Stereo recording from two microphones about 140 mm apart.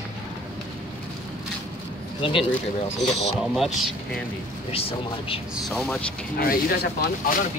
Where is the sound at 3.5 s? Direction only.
Centre (ahead or behind).